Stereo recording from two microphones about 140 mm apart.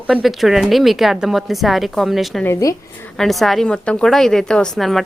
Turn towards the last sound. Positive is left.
turn(degrees=0)  # may be behind; listen again after turning